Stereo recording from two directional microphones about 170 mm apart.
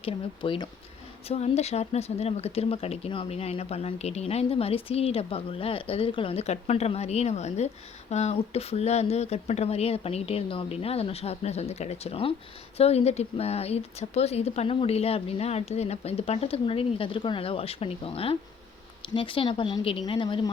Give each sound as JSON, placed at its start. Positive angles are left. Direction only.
{"t": 0.0, "sound": "a woman's voice", "side_deg": 30}